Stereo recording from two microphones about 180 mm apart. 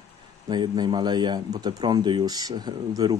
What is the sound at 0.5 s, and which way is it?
Speech, 25° right (ahead or behind).